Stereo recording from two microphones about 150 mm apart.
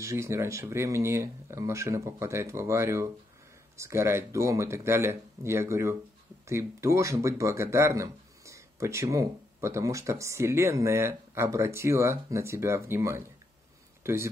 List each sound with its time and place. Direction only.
0.0 s speech: 20° right (ahead or behind)